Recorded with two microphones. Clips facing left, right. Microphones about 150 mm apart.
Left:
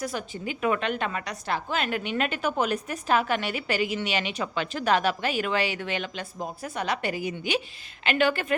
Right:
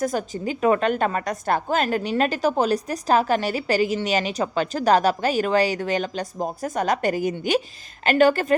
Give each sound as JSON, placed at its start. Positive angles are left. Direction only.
{"t": 0.0, "sound": "a woman's voice", "side_deg": -45}